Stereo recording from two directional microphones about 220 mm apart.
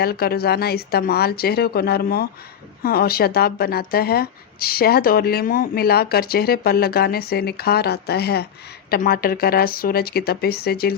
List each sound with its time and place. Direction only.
0.0 s speech: 45° left (ahead or behind)